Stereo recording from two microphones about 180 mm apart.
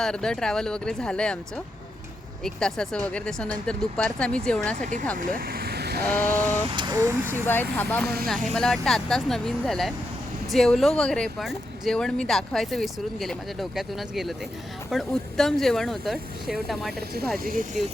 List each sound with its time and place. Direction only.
0.0 s speech: 5° left (ahead or behind)
5.1 s speech: 50° right (ahead or behind)
6.2 s a sound: 45° right (ahead or behind)
6.7 s speech: 20° right (ahead or behind)
7.4 s speech: 10° left (ahead or behind)
17.3 s speech: 55° right (ahead or behind)